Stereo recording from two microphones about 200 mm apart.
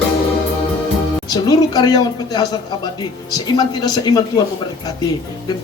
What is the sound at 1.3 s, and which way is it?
A woman's voice, 20° left (ahead or behind).